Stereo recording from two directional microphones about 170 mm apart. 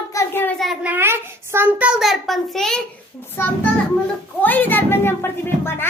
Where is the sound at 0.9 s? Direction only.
15° right (ahead or behind); by 2.8 s centre (ahead or behind).